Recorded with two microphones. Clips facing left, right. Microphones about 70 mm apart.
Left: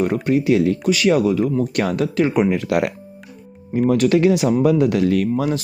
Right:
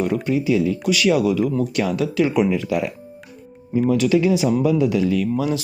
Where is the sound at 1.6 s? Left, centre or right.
Left.